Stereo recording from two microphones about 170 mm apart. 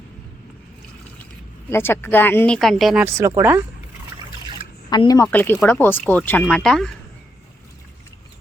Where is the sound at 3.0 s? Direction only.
15° right (ahead or behind).